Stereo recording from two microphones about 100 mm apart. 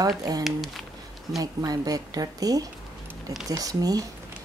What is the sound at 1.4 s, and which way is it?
Speech, 40° right (ahead or behind).